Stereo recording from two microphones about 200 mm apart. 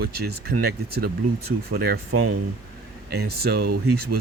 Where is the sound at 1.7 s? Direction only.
50° right (ahead or behind).